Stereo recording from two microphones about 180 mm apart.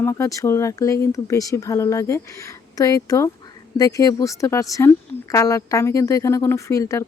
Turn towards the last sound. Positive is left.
turn(degrees=15)  # may be behind; listen again after turning